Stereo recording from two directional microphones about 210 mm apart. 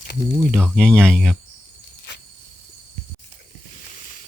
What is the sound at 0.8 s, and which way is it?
Speech, 5° left (ahead or behind).